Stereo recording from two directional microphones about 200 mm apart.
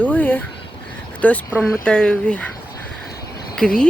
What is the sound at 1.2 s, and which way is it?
Speech, 5° left (ahead or behind).